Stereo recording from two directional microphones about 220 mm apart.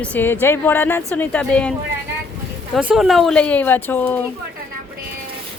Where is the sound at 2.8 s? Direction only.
5° right (ahead or behind).